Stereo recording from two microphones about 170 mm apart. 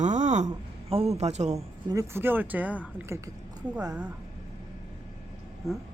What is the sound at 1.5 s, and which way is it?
Speech, 20° right (ahead or behind).